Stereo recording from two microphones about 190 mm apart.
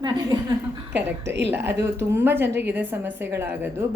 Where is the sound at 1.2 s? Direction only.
65° right (ahead or behind).